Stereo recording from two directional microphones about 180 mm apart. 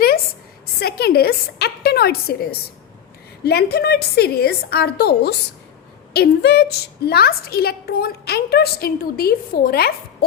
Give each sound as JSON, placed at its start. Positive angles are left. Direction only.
{"t": 0.8, "sound": "a woman's voice", "side_deg": 60}